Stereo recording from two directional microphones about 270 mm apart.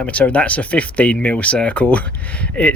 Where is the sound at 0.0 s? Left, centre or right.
Centre.